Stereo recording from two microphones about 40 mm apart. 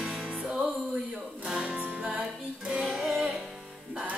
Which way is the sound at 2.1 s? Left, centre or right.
Right.